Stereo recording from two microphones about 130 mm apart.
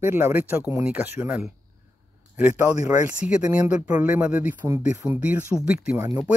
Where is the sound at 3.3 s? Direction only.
10° right (ahead or behind).